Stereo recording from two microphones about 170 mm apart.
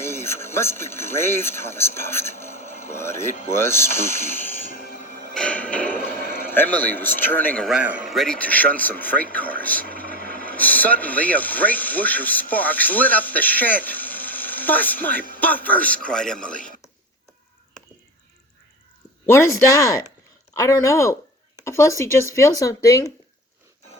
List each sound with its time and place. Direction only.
0.0 s a man's voice: 15° left (ahead or behind)
5.3 s television: 5° left (ahead or behind)
6.0 s a sound: 50° right (ahead or behind)
6.5 s a man's voice: 10° left (ahead or behind)
7.7 s a man's voice: 5° right (ahead or behind)
19.2 s a man's voice: 15° left (ahead or behind)